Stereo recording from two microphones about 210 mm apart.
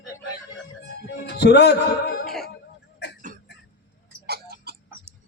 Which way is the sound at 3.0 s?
55° left (ahead or behind).